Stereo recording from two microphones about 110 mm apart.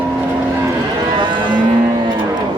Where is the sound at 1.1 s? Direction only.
45° right (ahead or behind).